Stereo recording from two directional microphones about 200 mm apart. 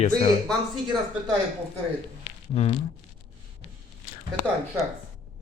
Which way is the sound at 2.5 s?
30° left (ahead or behind).